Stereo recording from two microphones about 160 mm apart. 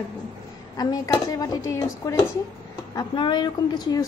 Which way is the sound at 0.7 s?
25° left (ahead or behind).